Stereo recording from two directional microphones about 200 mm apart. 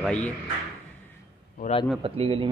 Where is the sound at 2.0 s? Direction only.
30° right (ahead or behind).